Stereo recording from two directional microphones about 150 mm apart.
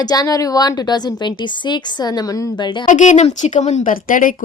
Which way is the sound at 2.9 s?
55° left (ahead or behind).